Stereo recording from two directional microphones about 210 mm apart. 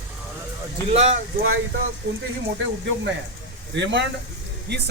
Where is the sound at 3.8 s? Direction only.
55° right (ahead or behind).